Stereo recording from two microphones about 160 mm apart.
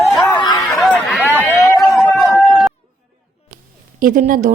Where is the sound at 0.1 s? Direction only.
Centre (ahead or behind).